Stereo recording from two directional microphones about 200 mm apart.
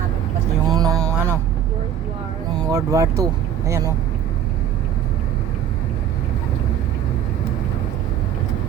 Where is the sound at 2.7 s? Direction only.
15° right (ahead or behind).